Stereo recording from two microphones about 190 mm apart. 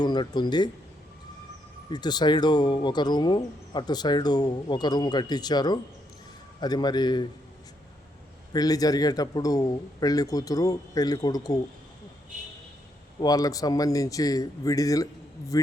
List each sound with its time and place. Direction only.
0.0 s speech: 25° left (ahead or behind)
1.9 s speech: 20° left (ahead or behind)
8.5 s speech: 20° left (ahead or behind)
13.1 s speech: 20° left (ahead or behind)